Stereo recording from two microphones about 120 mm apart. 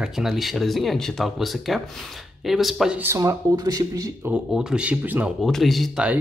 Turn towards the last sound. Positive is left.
turn(degrees=0)  # may be behind; listen again after turning